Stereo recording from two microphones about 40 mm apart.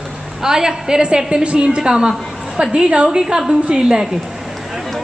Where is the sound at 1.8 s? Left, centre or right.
Centre.